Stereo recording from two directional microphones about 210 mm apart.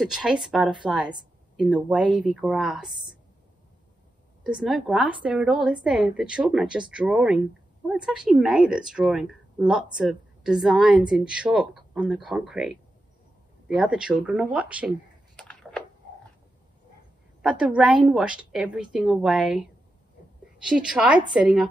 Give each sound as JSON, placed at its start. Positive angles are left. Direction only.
{"t": 0.0, "sound": "speech", "side_deg": -5}
{"t": 4.4, "sound": "speech", "side_deg": -5}
{"t": 13.7, "sound": "speech", "side_deg": -5}
{"t": 15.3, "sound": "a sound", "side_deg": 5}
{"t": 17.4, "sound": "speech", "side_deg": -5}
{"t": 20.6, "sound": "speech", "side_deg": -5}